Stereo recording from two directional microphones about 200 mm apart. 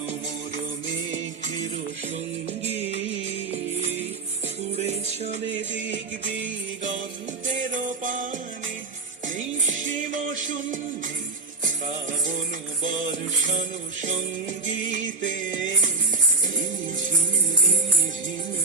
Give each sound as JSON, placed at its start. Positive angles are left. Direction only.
{"t": 2.5, "sound": "music", "side_deg": -35}
{"t": 4.8, "sound": "music", "side_deg": -35}
{"t": 5.5, "sound": "music", "side_deg": -65}
{"t": 7.4, "sound": "music", "side_deg": -40}
{"t": 12.8, "sound": "music", "side_deg": -40}
{"t": 15.2, "sound": "music", "side_deg": -40}